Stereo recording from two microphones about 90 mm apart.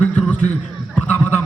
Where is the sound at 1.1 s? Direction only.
15° left (ahead or behind).